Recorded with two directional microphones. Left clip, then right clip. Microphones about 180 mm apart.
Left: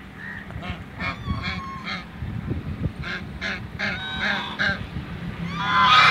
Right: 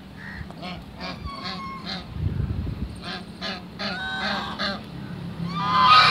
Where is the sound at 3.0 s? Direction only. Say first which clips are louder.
Left 3 dB; 20° left (ahead or behind).